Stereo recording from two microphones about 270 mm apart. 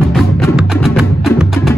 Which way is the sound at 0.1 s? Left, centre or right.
Centre.